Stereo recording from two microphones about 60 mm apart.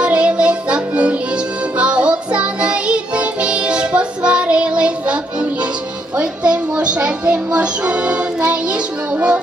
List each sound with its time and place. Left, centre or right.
0.0 s music: centre